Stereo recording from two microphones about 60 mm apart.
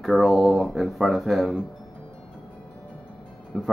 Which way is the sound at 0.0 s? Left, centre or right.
Centre.